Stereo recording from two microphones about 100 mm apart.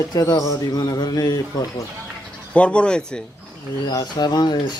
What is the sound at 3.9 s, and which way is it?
Speech, 40° left (ahead or behind).